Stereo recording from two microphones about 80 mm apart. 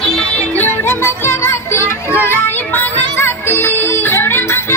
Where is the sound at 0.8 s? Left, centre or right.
Left.